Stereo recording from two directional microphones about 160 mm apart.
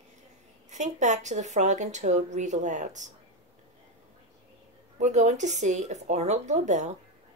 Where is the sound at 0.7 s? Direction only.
45° right (ahead or behind).